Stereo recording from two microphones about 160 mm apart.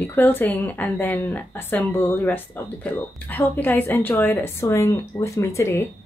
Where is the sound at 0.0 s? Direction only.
15° left (ahead or behind).